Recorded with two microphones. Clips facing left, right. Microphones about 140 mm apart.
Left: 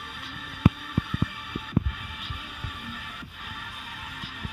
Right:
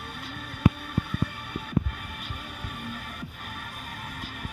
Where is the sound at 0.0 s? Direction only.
45° right (ahead or behind).